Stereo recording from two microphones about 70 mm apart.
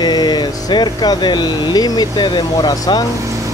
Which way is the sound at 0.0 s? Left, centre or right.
Left.